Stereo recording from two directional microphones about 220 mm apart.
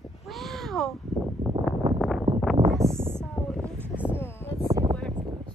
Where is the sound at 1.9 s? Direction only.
Centre (ahead or behind).